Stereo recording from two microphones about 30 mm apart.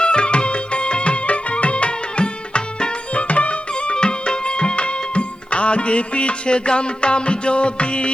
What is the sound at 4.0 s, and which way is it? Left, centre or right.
Music, left.